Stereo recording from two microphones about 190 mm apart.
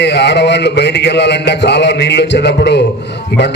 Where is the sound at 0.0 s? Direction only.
65° left (ahead or behind).